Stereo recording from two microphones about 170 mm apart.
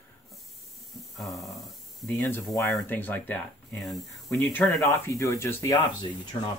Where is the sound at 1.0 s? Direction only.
Centre (ahead or behind).